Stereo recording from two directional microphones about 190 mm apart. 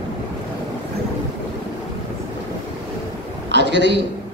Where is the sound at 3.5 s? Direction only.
70° right (ahead or behind).